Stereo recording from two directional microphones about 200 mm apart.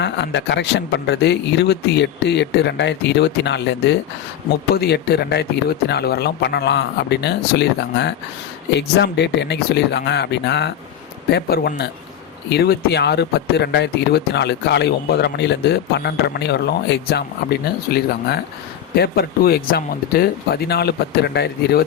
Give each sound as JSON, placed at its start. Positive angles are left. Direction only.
{"t": 0.0, "sound": "speech", "side_deg": 60}